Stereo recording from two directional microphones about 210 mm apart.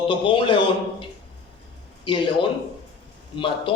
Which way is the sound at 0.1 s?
25° left (ahead or behind).